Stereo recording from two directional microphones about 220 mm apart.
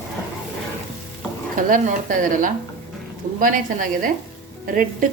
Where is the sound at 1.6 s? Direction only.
35° right (ahead or behind).